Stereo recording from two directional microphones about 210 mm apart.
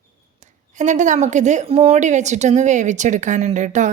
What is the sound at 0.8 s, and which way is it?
A woman's voice, 35° right (ahead or behind).